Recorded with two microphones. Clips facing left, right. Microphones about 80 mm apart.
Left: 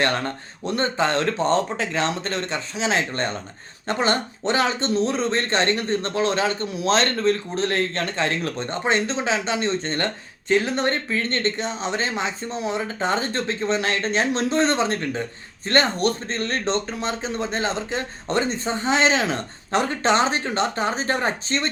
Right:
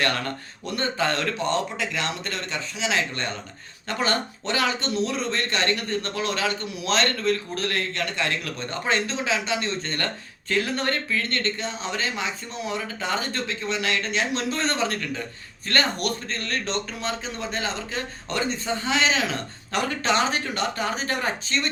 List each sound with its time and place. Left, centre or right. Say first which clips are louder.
0.0 s speech: left 3 dB; left